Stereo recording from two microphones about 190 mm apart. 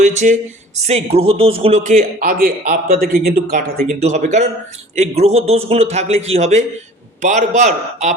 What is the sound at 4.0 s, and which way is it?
Speech, 35° right (ahead or behind).